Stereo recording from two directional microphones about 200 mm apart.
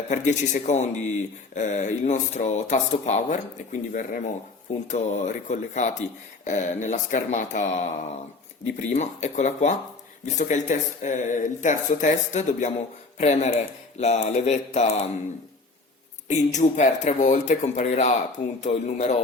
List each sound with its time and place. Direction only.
0.1 s speech: 35° left (ahead or behind)
16.3 s speech: 35° left (ahead or behind)